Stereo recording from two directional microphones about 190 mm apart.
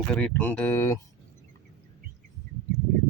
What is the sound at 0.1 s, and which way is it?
Speech, 5° left (ahead or behind).